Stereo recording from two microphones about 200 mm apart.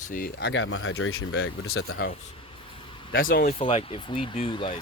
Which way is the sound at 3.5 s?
30° left (ahead or behind).